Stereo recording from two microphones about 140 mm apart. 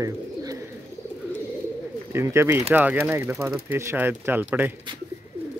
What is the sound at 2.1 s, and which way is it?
Speech, 20° right (ahead or behind).